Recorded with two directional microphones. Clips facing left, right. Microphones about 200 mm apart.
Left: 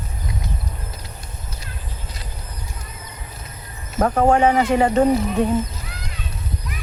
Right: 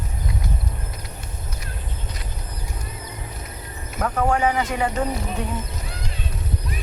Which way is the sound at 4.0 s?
30° left (ahead or behind).